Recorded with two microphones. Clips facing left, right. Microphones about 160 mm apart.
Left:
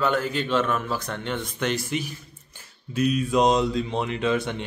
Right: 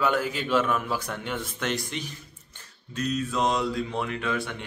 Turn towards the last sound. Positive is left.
turn(degrees=20)  # may be behind; listen again after turning